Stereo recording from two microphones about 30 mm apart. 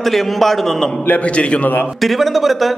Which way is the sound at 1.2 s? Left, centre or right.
Left.